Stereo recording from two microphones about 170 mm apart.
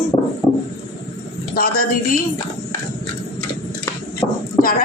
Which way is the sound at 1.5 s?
60° left (ahead or behind).